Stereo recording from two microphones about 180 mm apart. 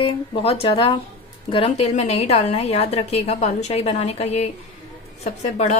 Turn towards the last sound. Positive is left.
turn(degrees=40)  # may be behind; listen again after turning